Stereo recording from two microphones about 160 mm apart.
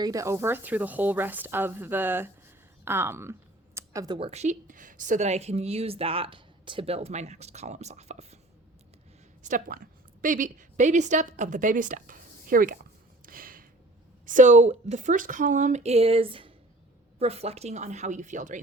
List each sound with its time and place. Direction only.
0.0 s speech: 20° right (ahead or behind)
3.8 s a sound: 20° right (ahead or behind)
4.2 s speech: 45° right (ahead or behind)
9.4 s a woman's voice: 55° right (ahead or behind)